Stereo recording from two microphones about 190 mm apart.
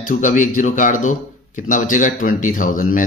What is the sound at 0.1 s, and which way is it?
Speech, 40° left (ahead or behind).